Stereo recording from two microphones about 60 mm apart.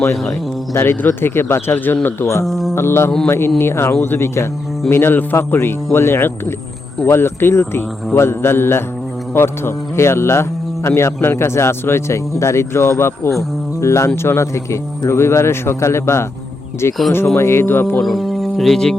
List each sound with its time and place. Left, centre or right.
0.8 s speech: left
2.4 s speech: centre
2.7 s a man's voice: left
18.0 s speech: centre